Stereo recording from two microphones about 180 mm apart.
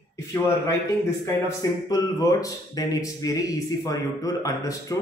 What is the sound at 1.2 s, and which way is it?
Speech, 15° left (ahead or behind).